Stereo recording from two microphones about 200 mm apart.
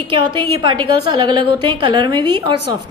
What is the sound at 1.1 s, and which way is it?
A woman's voice, 20° right (ahead or behind).